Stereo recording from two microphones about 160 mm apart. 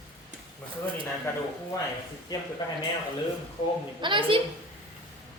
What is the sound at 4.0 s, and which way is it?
Speech, 30° right (ahead or behind).